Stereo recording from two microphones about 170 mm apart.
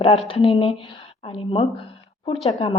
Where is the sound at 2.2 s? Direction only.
35° left (ahead or behind).